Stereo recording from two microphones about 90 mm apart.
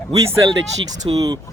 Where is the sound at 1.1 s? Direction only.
45° right (ahead or behind).